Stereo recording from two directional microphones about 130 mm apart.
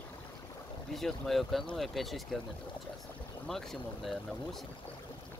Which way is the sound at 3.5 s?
5° left (ahead or behind).